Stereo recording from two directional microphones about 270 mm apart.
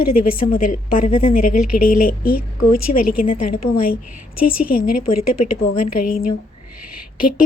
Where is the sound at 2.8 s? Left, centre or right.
Left.